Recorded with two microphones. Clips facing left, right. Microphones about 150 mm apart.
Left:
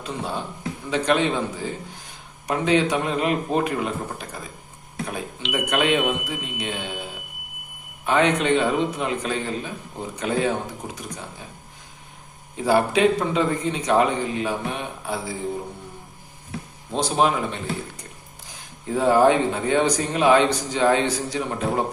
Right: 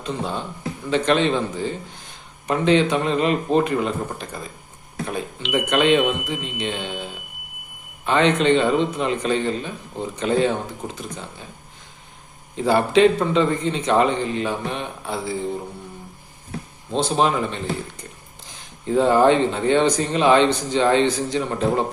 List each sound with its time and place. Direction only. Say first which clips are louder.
0.0 s a man's voice: right 2 dB; 10° left (ahead or behind)
5.4 s a man's voice: right 3 dB; 5° left (ahead or behind)
12.5 s a man's voice: right 3 dB; 10° left (ahead or behind)
16.9 s a man's voice: right 1 dB; 10° left (ahead or behind)
18.9 s a man's voice: right 2 dB; 10° left (ahead or behind)